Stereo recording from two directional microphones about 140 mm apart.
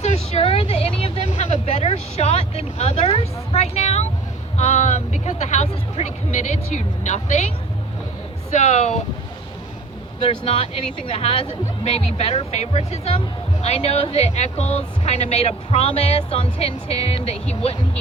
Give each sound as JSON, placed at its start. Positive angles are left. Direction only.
{"t": 0.0, "sound": "vehicle", "side_deg": 50}
{"t": 1.3, "sound": "speech", "side_deg": 55}
{"t": 8.5, "sound": "speech", "side_deg": 55}
{"t": 10.2, "sound": "speech", "side_deg": 45}